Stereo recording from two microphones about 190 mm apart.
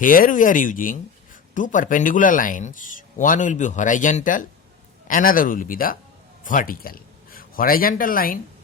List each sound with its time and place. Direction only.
0.0 s speech: 45° left (ahead or behind)